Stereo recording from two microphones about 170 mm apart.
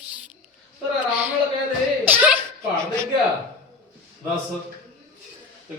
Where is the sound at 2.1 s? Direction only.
10° right (ahead or behind).